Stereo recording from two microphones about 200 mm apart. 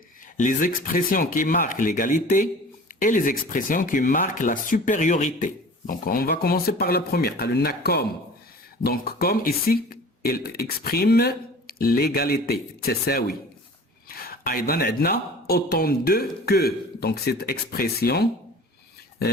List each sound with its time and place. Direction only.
0.3 s speech: 40° left (ahead or behind)